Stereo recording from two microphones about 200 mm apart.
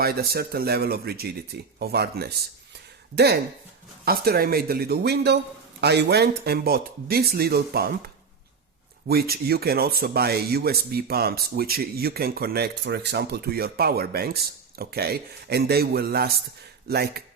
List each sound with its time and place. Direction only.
0.0 s speech: 50° right (ahead or behind)
4.0 s speech: 50° right (ahead or behind)
9.0 s speech: 50° right (ahead or behind)